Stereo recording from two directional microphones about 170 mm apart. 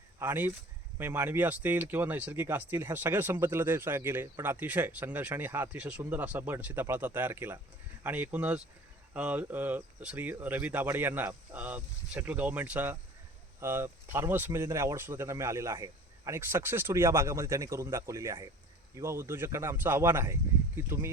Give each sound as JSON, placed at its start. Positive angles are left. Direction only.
{"t": 0.2, "sound": "speech", "side_deg": -15}